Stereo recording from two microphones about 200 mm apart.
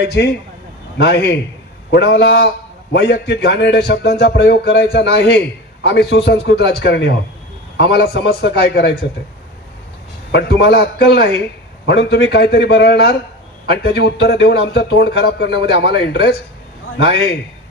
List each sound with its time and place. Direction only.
0.0 s a man's voice: 55° left (ahead or behind)
10.3 s a man's voice: 55° left (ahead or behind)